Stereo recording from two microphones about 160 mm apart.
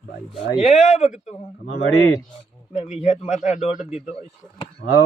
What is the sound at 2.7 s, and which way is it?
Speech, 45° left (ahead or behind).